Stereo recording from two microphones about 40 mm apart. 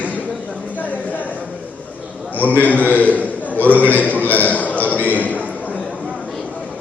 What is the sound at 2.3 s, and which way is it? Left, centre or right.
A man's voice, left.